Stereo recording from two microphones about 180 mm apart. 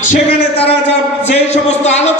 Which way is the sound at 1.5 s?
40° left (ahead or behind).